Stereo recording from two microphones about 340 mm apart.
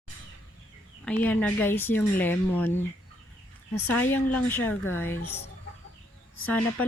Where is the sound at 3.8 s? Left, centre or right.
Left.